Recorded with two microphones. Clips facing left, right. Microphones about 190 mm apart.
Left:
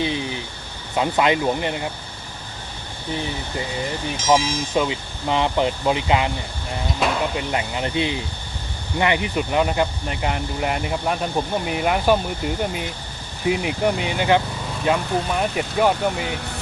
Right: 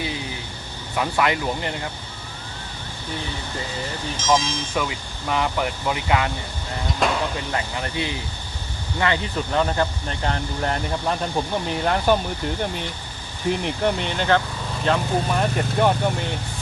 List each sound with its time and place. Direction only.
0.0 s vehicle: 20° left (ahead or behind)
0.9 s speech: 20° left (ahead or behind)
4.2 s speech: 10° left (ahead or behind)
4.7 s speech: 20° left (ahead or behind)
7.0 s a sound: centre (ahead or behind)
7.3 s speech: 20° left (ahead or behind)
13.5 s speech: 5° left (ahead or behind)